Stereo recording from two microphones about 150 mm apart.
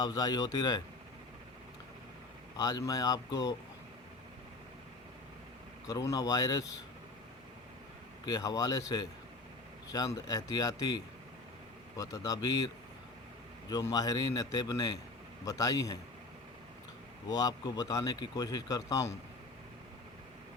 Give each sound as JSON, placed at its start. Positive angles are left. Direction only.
{"t": 0.0, "sound": "speech", "side_deg": 25}
{"t": 2.6, "sound": "speech", "side_deg": 25}
{"t": 5.9, "sound": "speech", "side_deg": 25}
{"t": 8.3, "sound": "speech", "side_deg": 25}
{"t": 17.2, "sound": "speech", "side_deg": 25}